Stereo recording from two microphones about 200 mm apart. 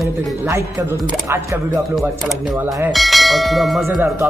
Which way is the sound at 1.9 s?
Centre (ahead or behind).